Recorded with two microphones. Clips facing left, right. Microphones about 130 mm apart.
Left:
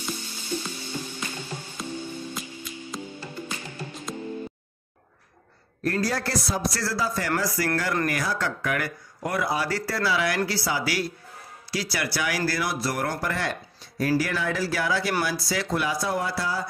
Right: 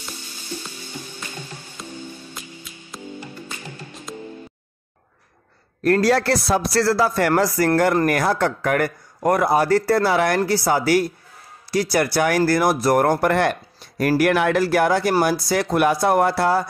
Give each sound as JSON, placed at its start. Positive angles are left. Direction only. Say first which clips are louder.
{"t": 1.8, "sound": "music", "louder": "left 2 dB", "side_deg": 0}
{"t": 4.1, "sound": "music", "louder": "right 1 dB", "side_deg": 0}
{"t": 5.8, "sound": "a man's voice", "louder": "right 9 dB", "side_deg": -70}